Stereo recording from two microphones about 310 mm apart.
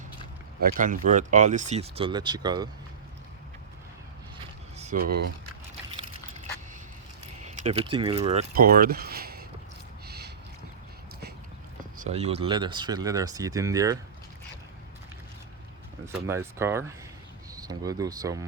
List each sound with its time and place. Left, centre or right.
0.6 s speech: right
4.8 s speech: right
7.4 s keys jangling: centre
7.9 s speech: centre
10.1 s a sound: right
11.9 s speech: right
16.1 s speech: centre